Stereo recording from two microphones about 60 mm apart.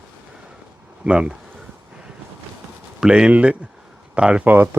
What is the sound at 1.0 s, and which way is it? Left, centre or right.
Speech, centre.